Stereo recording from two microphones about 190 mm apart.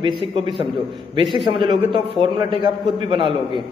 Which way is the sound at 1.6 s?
25° right (ahead or behind).